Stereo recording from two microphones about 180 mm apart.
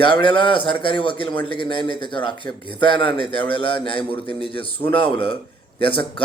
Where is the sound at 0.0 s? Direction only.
30° left (ahead or behind).